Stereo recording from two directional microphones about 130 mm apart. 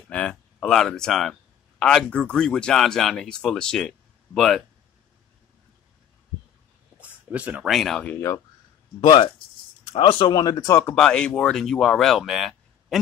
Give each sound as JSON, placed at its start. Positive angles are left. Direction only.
{"t": 0.1, "sound": "speech", "side_deg": 10}
{"t": 7.0, "sound": "a sound", "side_deg": -10}
{"t": 7.7, "sound": "speech", "side_deg": 0}
{"t": 9.0, "sound": "speech", "side_deg": 40}
{"t": 10.4, "sound": "speech", "side_deg": 30}
{"t": 11.0, "sound": "speech", "side_deg": 5}